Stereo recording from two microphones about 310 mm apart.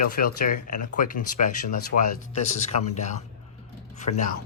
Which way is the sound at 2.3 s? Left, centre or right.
Left.